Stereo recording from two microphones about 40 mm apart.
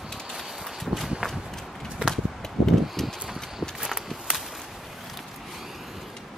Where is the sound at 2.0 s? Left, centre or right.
Right.